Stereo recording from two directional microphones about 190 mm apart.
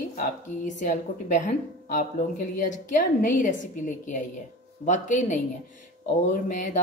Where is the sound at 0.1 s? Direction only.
40° left (ahead or behind).